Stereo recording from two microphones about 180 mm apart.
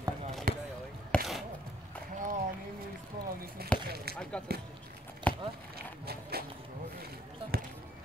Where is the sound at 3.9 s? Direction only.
60° right (ahead or behind).